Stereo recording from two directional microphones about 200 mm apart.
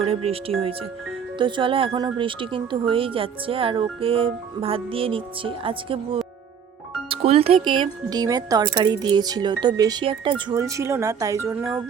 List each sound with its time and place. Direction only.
0.0 s speech: 30° right (ahead or behind); by 11.6 s 15° right (ahead or behind)